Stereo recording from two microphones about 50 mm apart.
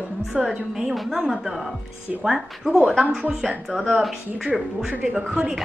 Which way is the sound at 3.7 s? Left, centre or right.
Right.